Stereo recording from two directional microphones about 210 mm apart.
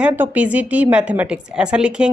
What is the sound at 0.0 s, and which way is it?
A woman's voice, 10° right (ahead or behind).